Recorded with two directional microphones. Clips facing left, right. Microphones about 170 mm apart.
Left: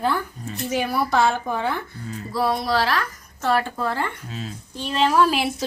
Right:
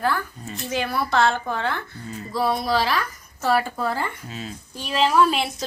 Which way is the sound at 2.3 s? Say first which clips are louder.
Even; centre (ahead or behind).